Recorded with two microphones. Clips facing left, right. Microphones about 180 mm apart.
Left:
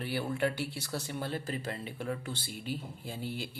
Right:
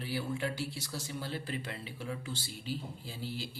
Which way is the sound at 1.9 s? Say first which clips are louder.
Left 3 dB; 55° left (ahead or behind).